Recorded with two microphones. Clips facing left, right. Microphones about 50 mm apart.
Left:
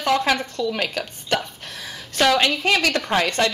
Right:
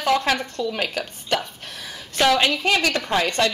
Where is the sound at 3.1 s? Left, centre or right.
Left.